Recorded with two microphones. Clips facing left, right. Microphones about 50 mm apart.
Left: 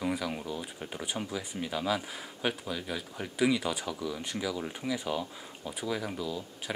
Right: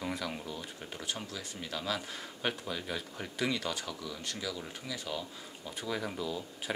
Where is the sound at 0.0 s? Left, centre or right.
Centre.